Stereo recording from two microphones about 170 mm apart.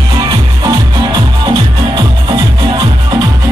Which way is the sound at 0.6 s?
25° right (ahead or behind).